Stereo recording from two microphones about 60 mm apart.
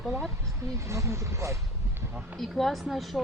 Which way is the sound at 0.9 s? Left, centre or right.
Right.